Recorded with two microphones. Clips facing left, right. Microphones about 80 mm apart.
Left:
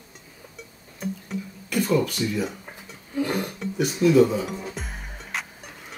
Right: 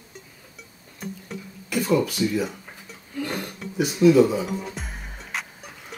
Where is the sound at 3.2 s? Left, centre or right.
Centre.